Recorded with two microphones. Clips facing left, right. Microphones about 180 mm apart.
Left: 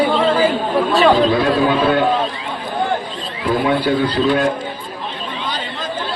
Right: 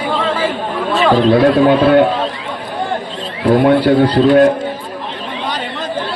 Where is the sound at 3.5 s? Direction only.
60° right (ahead or behind).